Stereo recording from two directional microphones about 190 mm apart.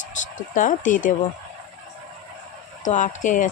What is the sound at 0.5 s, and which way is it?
Speech, 45° left (ahead or behind).